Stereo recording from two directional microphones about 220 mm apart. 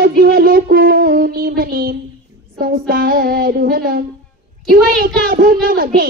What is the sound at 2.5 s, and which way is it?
Child singing, 40° right (ahead or behind).